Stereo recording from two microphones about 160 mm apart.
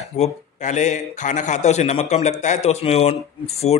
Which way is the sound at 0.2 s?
50° left (ahead or behind).